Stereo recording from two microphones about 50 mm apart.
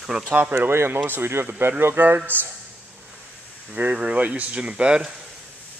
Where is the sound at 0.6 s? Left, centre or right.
Right.